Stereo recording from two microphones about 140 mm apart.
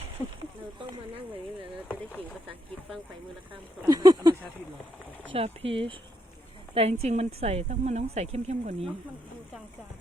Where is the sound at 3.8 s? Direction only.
30° right (ahead or behind).